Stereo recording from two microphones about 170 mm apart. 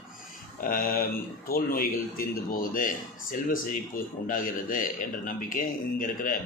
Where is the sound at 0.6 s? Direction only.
55° left (ahead or behind).